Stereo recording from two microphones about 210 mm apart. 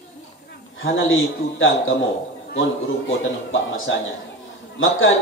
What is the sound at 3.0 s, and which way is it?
A man's voice, 70° left (ahead or behind).